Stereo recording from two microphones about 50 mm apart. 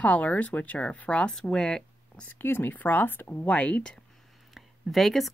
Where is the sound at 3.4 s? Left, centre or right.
Left.